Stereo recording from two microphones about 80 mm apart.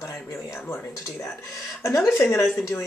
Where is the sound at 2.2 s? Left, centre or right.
Left.